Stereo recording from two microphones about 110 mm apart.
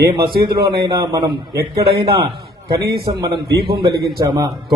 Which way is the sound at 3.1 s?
45° right (ahead or behind).